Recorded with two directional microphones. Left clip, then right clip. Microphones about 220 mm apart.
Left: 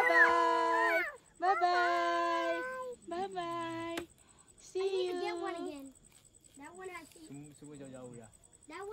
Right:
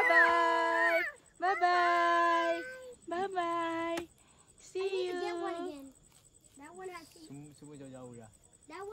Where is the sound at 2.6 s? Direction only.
25° left (ahead or behind).